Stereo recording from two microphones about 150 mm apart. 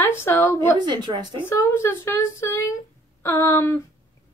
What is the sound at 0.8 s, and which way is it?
Speech, 30° right (ahead or behind).